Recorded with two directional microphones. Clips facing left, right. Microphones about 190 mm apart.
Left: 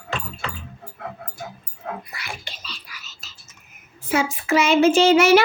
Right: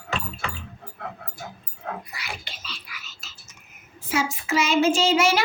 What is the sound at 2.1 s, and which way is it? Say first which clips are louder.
Music: left 1 dB; 50° left (ahead or behind).